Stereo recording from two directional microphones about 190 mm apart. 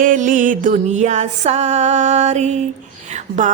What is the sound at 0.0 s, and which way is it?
Music, 45° right (ahead or behind).